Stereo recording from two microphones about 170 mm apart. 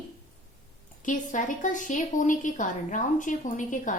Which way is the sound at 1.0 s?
50° left (ahead or behind).